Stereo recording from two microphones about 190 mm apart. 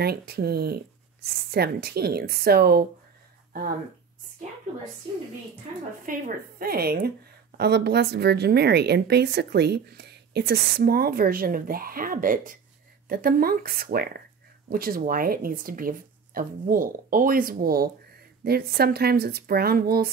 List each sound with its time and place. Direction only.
0.0 s a woman's voice: 55° right (ahead or behind)
6.0 s a woman's voice: 50° right (ahead or behind)